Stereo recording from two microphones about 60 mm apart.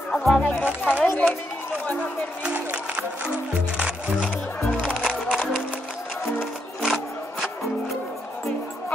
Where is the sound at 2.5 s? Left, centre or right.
Right.